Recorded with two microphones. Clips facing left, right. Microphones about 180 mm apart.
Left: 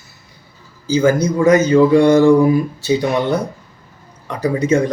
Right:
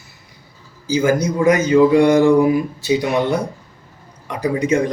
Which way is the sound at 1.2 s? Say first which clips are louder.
Left 3 dB; 15° right (ahead or behind).